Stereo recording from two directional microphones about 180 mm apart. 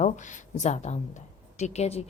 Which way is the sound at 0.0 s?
40° left (ahead or behind).